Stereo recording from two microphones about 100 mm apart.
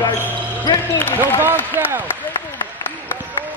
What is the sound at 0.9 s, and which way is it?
Speech, 20° left (ahead or behind).